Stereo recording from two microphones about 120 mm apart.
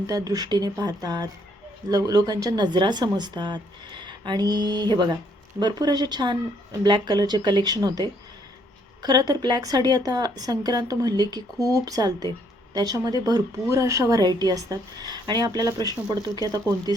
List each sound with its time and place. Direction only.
0.1 s a woman's voice: 30° right (ahead or behind)